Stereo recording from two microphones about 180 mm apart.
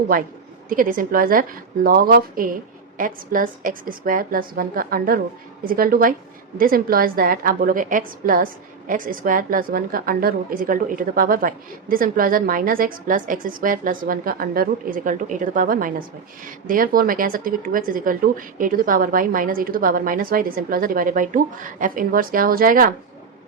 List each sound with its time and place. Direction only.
0.7 s a woman's voice: 50° right (ahead or behind)